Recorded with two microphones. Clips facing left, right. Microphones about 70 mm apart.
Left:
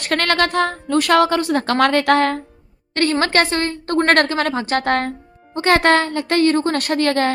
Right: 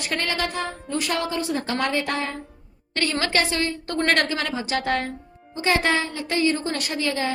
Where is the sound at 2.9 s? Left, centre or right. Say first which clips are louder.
Left 6 dB; left.